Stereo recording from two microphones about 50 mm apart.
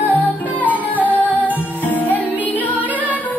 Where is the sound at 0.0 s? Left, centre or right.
Left.